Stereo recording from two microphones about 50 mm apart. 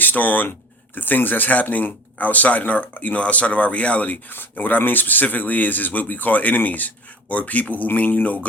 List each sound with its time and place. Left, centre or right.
0.0 s speech: left